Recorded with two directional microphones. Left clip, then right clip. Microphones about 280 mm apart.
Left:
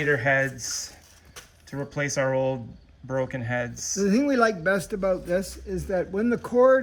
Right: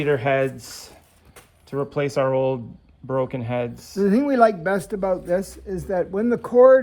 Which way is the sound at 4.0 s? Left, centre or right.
Centre.